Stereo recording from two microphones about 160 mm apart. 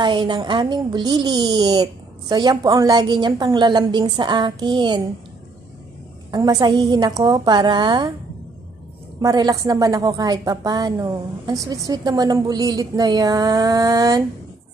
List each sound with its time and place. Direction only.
0.0 s a woman's voice: 30° right (ahead or behind)
6.3 s a woman's voice: 25° right (ahead or behind)
9.2 s a woman's voice: 25° right (ahead or behind)